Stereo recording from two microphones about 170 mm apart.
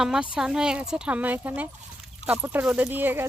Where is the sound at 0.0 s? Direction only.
5° right (ahead or behind).